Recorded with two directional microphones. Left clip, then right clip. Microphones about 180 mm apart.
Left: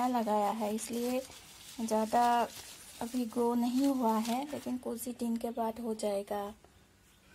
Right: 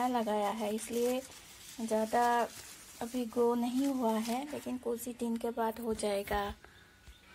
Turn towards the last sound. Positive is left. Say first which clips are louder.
# right 1 dB
turn(degrees=20)  # may be behind; listen again after turning